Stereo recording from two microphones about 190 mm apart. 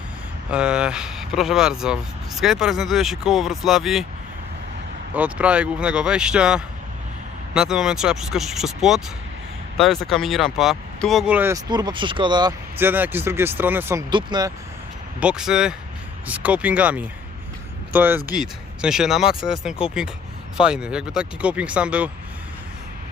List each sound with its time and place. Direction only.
0.5 s speech: 5° right (ahead or behind)
5.1 s speech: 5° right (ahead or behind); by 12.5 s 20° right (ahead or behind)
12.7 s speech: 10° right (ahead or behind)
14.1 s speech: 25° right (ahead or behind)
15.2 s speech: 5° right (ahead or behind)